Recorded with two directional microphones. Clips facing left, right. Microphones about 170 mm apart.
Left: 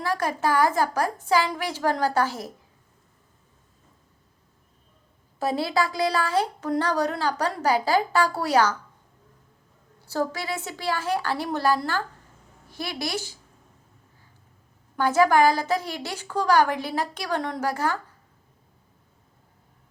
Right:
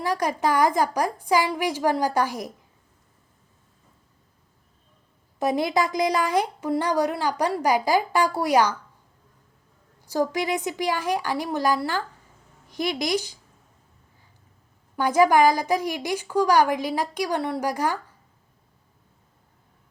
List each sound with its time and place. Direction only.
0.0 s speech: 15° right (ahead or behind)
5.4 s speech: 15° right (ahead or behind)
10.1 s a woman's voice: 15° right (ahead or behind)
14.9 s speech: 15° right (ahead or behind)